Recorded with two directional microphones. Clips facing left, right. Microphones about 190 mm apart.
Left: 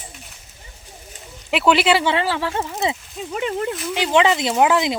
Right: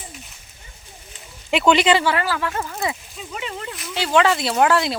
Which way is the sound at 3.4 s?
50° left (ahead or behind).